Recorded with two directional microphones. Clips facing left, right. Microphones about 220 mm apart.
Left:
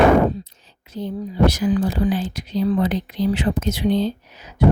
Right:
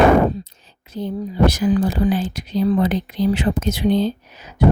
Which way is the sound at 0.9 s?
50° right (ahead or behind).